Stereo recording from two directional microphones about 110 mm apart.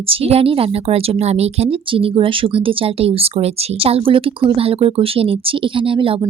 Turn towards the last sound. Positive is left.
turn(degrees=-50)  # may be behind; listen again after turning